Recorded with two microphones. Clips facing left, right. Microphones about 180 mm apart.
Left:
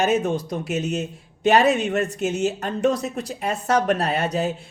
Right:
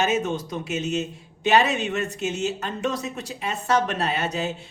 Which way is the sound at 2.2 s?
40° left (ahead or behind).